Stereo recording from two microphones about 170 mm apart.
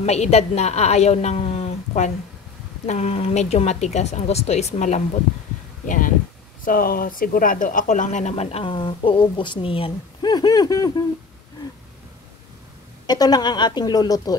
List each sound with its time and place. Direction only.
0.0 s a woman's voice: 40° left (ahead or behind)
5.9 s a sound: 50° left (ahead or behind)
6.6 s speech: 55° left (ahead or behind); by 10.9 s 20° left (ahead or behind)
13.0 s a woman's voice: 25° left (ahead or behind)